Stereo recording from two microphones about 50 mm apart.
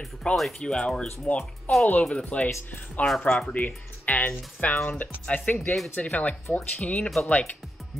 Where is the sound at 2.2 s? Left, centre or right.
Left.